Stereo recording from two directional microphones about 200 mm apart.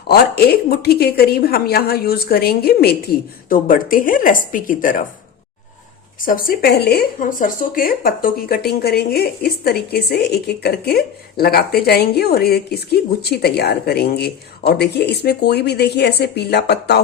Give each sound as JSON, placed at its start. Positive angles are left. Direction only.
{"t": 0.1, "sound": "speech", "side_deg": 50}
{"t": 6.1, "sound": "speech", "side_deg": 45}